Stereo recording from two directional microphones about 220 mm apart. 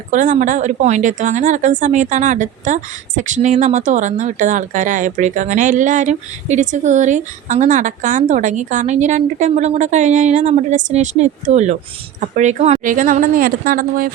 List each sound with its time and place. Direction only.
0.1 s a woman's voice: 35° right (ahead or behind)